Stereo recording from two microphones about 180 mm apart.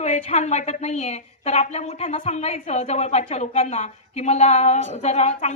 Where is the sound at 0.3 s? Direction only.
40° left (ahead or behind).